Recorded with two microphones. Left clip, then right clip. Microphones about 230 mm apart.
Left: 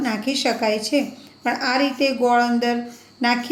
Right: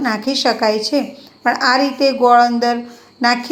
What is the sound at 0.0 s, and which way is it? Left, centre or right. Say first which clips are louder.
A woman's voice: right 5 dB; centre.